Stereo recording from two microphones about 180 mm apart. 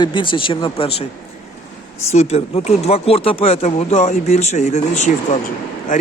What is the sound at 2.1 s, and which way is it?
Speech, 35° left (ahead or behind).